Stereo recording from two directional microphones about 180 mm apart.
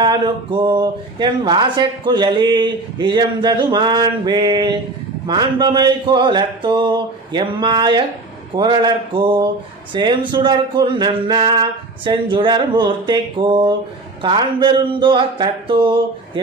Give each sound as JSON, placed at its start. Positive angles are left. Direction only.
{"t": 0.0, "sound": "speech", "side_deg": -25}